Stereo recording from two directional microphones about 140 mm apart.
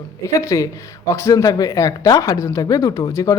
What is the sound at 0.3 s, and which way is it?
A woman's voice, 25° left (ahead or behind).